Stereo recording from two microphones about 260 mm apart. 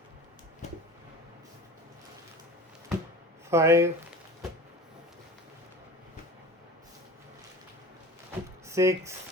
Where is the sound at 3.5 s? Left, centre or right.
Centre.